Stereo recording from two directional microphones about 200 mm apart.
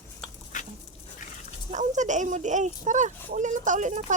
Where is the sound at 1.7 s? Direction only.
35° right (ahead or behind).